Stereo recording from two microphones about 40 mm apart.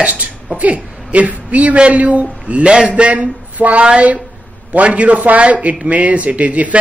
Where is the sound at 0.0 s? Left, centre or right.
Right.